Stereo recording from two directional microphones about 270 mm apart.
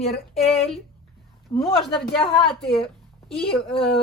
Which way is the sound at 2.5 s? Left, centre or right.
Centre.